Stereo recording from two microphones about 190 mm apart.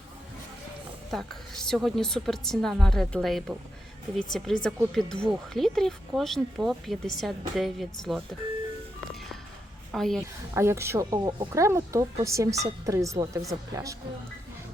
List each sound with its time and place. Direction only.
1.1 s speech: centre (ahead or behind)
9.9 s speech: centre (ahead or behind)
10.2 s a woman's voice: 15° right (ahead or behind)